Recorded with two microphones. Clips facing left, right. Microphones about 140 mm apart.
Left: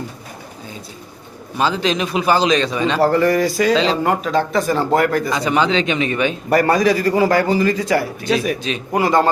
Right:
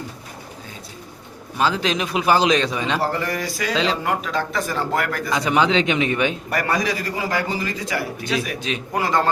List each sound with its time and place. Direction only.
1.5 s a man's voice: 5° right (ahead or behind)
3.0 s a man's voice: 45° left (ahead or behind); by 5.3 s 30° left (ahead or behind)
5.3 s a man's voice: 10° right (ahead or behind)
6.5 s a man's voice: 35° left (ahead or behind)
8.9 s a man's voice: 15° left (ahead or behind)